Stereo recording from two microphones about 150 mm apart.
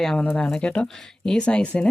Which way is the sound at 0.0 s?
5° left (ahead or behind).